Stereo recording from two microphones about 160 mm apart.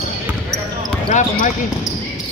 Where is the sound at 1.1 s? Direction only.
50° left (ahead or behind).